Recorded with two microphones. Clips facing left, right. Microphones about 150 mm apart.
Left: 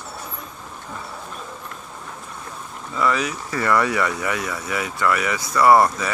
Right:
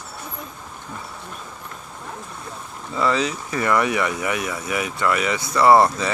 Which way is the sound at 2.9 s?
25° right (ahead or behind).